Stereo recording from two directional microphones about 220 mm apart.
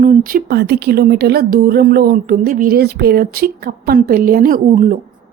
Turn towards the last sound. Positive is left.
turn(degrees=-35)  # may be behind; listen again after turning